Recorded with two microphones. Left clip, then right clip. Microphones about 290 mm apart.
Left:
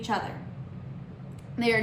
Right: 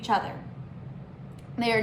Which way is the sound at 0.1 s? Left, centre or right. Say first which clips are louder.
Right 4 dB; centre.